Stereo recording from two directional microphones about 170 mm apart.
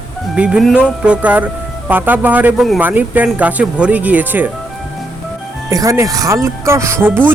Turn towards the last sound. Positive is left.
turn(degrees=-15)  # may be behind; listen again after turning